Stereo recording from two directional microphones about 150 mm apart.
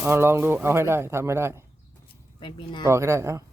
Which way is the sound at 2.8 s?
20° right (ahead or behind).